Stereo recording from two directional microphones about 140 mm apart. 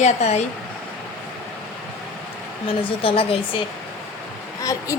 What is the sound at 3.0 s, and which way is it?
Speech, 40° left (ahead or behind).